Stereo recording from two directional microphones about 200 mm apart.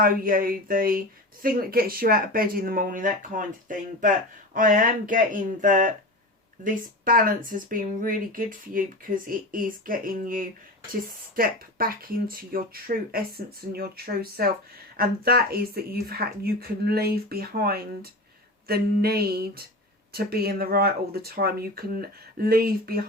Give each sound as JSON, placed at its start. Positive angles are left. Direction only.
{"t": 0.0, "sound": "speech", "side_deg": -45}